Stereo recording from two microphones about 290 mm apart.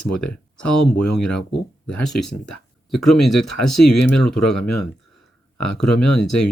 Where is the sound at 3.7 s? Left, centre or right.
Left.